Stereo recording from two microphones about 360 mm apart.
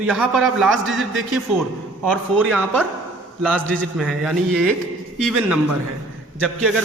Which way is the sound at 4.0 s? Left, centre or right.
Centre.